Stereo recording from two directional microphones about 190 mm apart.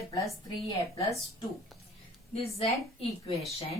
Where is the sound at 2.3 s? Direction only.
30° left (ahead or behind).